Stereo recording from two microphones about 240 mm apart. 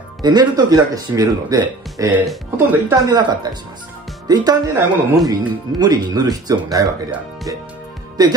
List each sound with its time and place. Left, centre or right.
0.2 s speech: centre